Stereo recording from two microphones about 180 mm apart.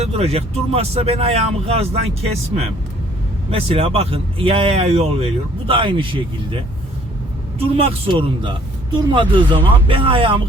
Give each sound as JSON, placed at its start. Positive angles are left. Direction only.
{"t": 0.0, "sound": "speech", "side_deg": -35}
{"t": 7.6, "sound": "speech", "side_deg": -30}
{"t": 9.1, "sound": "speech", "side_deg": -30}